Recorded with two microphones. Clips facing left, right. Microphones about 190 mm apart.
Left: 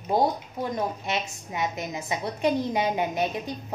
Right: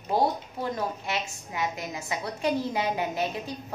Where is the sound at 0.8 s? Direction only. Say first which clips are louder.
Left 2 dB; 20° left (ahead or behind).